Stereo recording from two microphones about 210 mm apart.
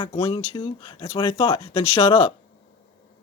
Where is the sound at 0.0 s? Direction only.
25° left (ahead or behind).